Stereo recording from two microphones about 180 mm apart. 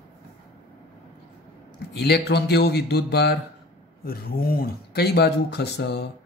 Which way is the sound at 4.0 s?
55° left (ahead or behind).